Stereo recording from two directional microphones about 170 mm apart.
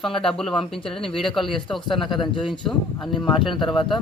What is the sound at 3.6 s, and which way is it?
Speech, 30° left (ahead or behind).